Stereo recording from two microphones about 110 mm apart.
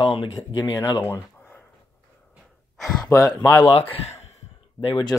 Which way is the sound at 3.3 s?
40° left (ahead or behind).